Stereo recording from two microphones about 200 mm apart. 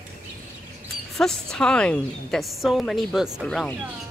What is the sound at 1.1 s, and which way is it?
A woman's voice, centre (ahead or behind).